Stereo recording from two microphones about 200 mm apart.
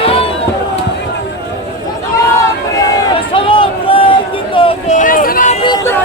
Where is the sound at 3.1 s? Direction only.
25° left (ahead or behind); by 5.5 s 45° left (ahead or behind).